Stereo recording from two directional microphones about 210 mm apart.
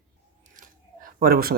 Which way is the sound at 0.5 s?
40° right (ahead or behind).